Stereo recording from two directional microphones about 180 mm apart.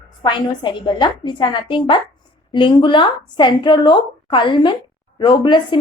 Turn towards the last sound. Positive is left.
turn(degrees=25)  # may be behind; listen again after turning